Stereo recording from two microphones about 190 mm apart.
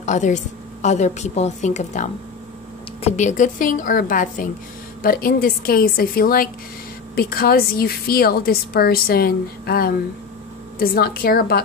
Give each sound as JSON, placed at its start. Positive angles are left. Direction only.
{"t": 0.0, "sound": "a woman's voice", "side_deg": 40}